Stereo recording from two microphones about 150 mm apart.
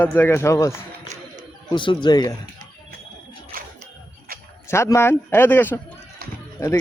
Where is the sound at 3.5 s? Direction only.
75° right (ahead or behind).